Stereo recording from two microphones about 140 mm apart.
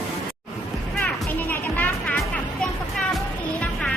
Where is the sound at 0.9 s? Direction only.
10° left (ahead or behind).